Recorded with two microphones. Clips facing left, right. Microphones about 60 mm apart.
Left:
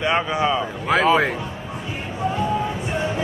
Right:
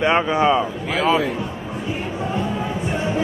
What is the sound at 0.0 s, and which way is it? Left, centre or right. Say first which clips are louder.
Speech: right 3 dB; right.